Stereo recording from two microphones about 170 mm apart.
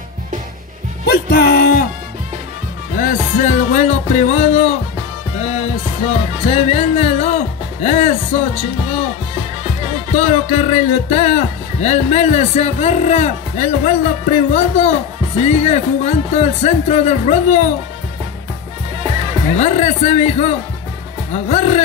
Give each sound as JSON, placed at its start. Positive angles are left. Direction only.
{"t": 1.0, "sound": "music", "side_deg": 65}
{"t": 3.0, "sound": "music", "side_deg": 50}
{"t": 6.4, "sound": "music", "side_deg": 35}
{"t": 10.1, "sound": "speech", "side_deg": 35}
{"t": 19.5, "sound": "speech", "side_deg": 40}